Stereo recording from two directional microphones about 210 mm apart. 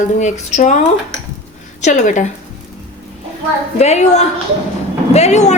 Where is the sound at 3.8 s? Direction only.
30° left (ahead or behind).